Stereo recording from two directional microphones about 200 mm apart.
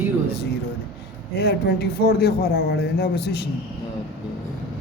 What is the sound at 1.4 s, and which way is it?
Speech, 55° left (ahead or behind).